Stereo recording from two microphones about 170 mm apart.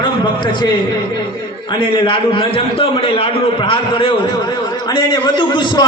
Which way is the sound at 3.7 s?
35° left (ahead or behind).